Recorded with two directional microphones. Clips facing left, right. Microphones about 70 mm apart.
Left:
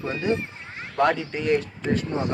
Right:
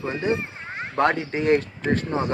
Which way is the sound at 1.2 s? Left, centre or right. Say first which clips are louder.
Right 3 dB; right.